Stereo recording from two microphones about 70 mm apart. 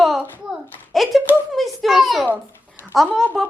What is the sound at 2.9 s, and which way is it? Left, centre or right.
Speech, centre.